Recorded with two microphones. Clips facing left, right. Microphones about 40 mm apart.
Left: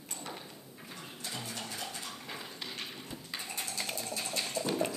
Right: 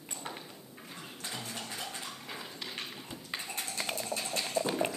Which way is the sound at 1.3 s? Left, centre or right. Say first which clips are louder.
Even; centre.